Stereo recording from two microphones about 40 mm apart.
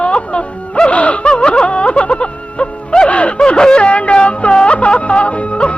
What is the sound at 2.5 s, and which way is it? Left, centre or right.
Music, left.